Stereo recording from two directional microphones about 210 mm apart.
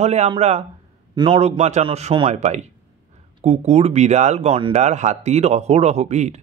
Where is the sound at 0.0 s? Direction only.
30° right (ahead or behind).